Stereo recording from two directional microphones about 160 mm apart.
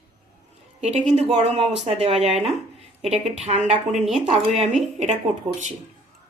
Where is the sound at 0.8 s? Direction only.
40° right (ahead or behind).